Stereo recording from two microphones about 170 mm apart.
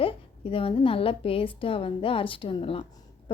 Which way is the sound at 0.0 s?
35° left (ahead or behind).